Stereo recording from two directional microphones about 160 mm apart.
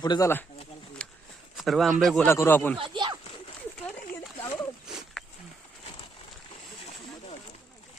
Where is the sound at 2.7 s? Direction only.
30° right (ahead or behind).